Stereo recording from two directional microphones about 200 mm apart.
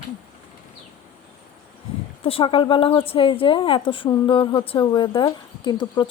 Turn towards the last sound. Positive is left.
turn(degrees=20)  # may be behind; listen again after turning